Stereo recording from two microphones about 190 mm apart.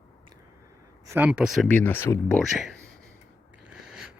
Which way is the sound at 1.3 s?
Centre (ahead or behind).